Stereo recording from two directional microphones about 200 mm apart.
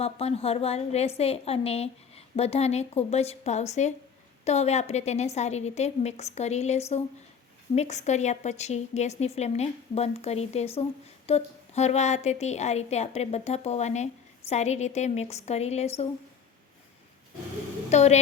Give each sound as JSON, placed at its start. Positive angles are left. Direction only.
{"t": 0.0, "sound": "a woman's voice", "side_deg": 30}
{"t": 17.8, "sound": "a woman's voice", "side_deg": 35}